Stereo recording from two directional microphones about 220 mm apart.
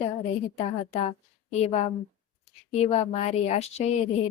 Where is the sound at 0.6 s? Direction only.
30° left (ahead or behind).